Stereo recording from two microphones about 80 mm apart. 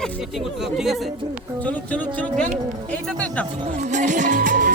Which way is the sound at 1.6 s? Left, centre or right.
Centre.